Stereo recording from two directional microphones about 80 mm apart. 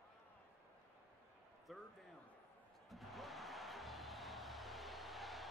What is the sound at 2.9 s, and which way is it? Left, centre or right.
Music, centre.